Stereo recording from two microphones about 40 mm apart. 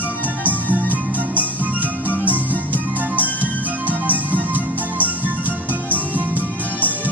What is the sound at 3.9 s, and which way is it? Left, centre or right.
Music, right.